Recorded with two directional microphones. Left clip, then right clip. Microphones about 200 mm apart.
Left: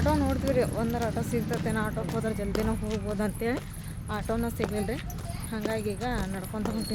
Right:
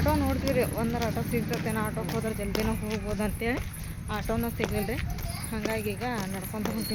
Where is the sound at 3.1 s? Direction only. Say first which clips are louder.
Even; 10° left (ahead or behind).